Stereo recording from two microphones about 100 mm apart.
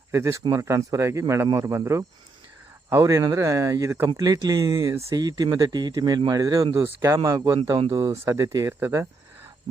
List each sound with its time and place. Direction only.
0.1 s speech: 30° right (ahead or behind)